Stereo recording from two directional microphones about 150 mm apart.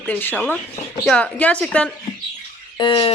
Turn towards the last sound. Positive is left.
turn(degrees=35)  # may be behind; listen again after turning